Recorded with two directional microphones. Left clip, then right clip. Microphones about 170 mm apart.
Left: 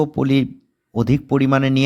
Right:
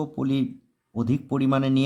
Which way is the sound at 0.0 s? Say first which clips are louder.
Left 8 dB; 40° left (ahead or behind).